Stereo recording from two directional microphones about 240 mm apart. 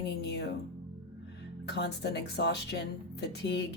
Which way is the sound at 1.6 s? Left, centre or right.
Left.